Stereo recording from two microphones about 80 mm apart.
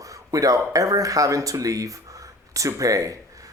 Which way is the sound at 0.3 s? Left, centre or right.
Right.